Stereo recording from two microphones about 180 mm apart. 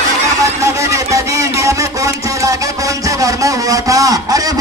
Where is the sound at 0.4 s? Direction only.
15° right (ahead or behind).